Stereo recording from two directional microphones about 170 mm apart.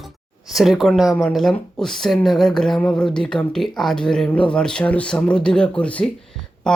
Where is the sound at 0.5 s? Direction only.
Centre (ahead or behind).